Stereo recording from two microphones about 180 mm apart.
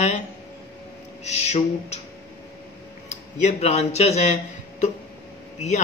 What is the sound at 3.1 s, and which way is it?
Speech, 40° left (ahead or behind).